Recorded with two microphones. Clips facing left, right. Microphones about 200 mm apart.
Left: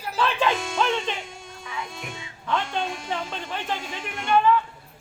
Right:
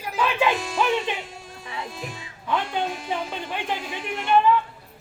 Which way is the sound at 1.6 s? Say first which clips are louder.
Right 1 dB; 35° right (ahead or behind).